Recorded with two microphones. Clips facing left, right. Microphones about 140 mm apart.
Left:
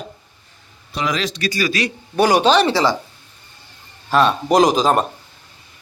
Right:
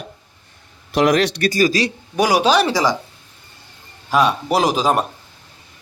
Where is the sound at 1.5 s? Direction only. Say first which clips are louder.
Right 2 dB; 40° right (ahead or behind).